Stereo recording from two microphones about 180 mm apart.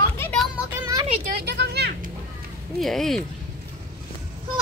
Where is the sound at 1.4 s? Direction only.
65° right (ahead or behind).